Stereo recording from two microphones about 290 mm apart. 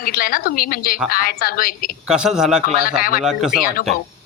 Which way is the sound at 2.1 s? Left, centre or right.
Centre.